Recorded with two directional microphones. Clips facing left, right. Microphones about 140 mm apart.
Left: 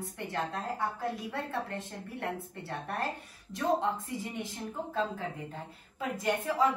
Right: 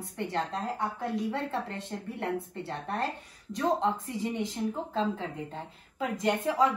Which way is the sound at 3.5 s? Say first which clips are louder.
Right 2 dB; 20° right (ahead or behind).